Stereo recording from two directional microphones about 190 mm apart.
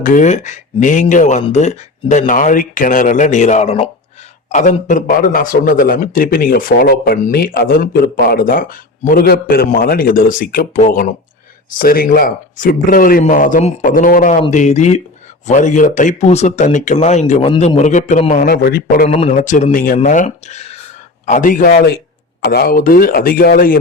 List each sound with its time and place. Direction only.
0.0 s a man's voice: 45° left (ahead or behind)
19.0 s a man's voice: 35° left (ahead or behind); by 23.8 s 50° left (ahead or behind)